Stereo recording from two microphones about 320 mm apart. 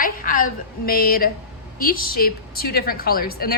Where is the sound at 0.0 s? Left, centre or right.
Left.